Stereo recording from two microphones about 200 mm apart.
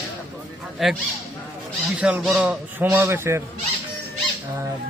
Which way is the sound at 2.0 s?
5° right (ahead or behind).